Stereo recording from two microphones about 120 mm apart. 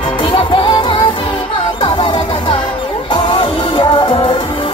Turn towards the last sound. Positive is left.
turn(degrees=45)  # may be behind; listen again after turning